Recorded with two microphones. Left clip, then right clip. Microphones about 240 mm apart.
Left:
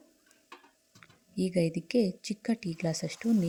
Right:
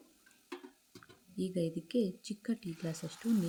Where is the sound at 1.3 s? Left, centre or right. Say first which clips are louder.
Left 7 dB; left.